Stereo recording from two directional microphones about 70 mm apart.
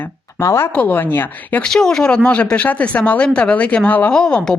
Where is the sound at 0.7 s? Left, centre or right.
Left.